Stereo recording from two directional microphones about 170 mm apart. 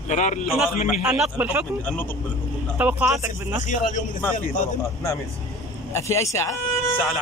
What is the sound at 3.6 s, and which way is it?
Speech, 50° left (ahead or behind).